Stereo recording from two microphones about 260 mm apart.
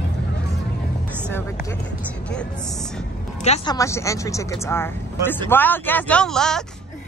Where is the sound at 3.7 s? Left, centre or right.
Centre.